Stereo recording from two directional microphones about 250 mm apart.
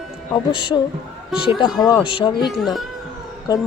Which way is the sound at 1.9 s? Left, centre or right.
Centre.